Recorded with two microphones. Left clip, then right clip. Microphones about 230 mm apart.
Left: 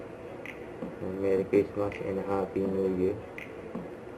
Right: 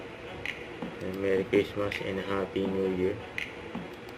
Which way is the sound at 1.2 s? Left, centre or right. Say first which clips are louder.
Left 1 dB; right.